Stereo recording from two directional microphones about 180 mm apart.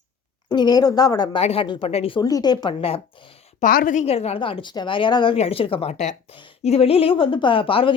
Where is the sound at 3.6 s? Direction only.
50° left (ahead or behind).